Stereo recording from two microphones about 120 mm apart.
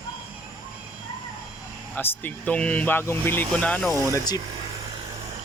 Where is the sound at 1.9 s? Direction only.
15° left (ahead or behind).